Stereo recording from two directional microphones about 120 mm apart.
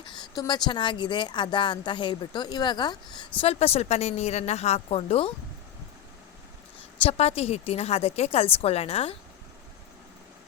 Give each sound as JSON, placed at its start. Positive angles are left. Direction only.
{"t": 0.0, "sound": "speech", "side_deg": 40}
{"t": 3.4, "sound": "a woman's voice", "side_deg": 55}
{"t": 7.0, "sound": "a woman's voice", "side_deg": 55}